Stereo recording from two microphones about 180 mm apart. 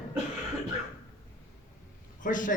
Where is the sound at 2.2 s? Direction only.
45° left (ahead or behind).